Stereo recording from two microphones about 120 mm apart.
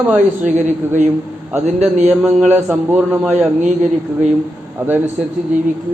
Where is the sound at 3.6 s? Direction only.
75° right (ahead or behind).